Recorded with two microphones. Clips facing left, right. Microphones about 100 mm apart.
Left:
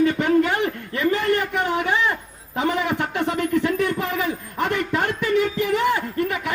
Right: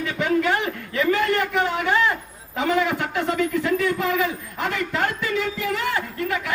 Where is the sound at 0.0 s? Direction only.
55° left (ahead or behind).